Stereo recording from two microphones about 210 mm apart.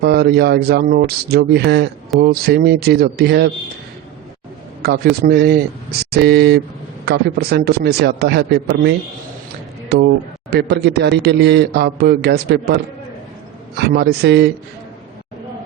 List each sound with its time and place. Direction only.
0.0 s a man's voice: 50° right (ahead or behind)
4.8 s a man's voice: 50° right (ahead or behind)